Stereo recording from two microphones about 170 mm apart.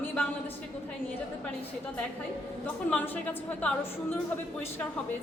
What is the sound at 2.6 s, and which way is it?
A woman's voice, 10° left (ahead or behind).